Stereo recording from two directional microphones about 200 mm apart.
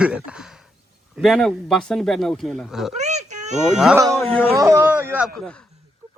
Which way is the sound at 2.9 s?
35° right (ahead or behind).